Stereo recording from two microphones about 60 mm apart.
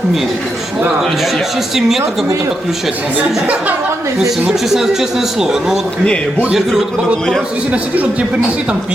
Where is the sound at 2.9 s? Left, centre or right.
Right.